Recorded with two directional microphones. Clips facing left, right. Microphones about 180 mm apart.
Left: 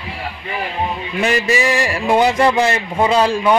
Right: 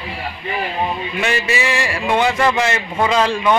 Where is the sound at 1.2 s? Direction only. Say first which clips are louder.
Left 4 dB; 40° left (ahead or behind).